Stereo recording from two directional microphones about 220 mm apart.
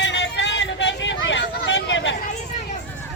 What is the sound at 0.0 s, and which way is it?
Vehicle, 55° left (ahead or behind).